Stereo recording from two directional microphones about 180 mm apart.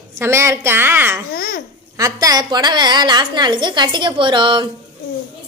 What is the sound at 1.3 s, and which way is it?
Babbling, 55° left (ahead or behind).